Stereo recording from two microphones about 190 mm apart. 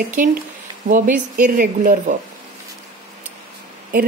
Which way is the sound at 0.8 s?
40° right (ahead or behind).